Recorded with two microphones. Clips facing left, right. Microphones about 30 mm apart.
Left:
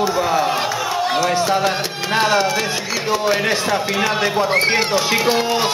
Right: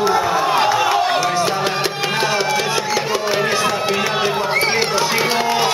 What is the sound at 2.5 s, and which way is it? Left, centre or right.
Music, centre.